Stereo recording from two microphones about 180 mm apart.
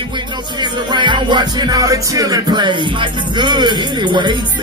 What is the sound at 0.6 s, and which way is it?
Music, 25° right (ahead or behind).